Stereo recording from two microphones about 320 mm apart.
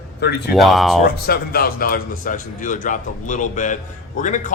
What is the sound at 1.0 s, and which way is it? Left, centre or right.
A man's voice, left.